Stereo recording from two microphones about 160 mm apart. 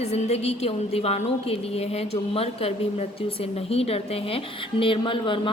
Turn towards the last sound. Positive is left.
turn(degrees=30)  # may be behind; listen again after turning